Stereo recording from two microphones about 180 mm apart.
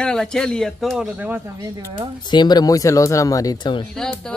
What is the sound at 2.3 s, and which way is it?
Speech, 20° left (ahead or behind).